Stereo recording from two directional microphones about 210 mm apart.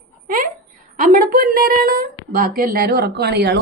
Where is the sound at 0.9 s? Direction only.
40° right (ahead or behind).